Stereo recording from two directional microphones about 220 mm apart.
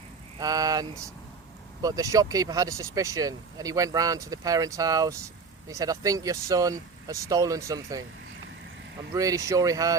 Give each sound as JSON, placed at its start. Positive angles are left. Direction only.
{"t": 0.3, "sound": "speech", "side_deg": -15}
{"t": 9.1, "sound": "speech", "side_deg": -15}